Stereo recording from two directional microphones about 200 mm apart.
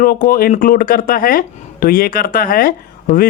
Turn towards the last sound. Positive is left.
turn(degrees=45)  # may be behind; listen again after turning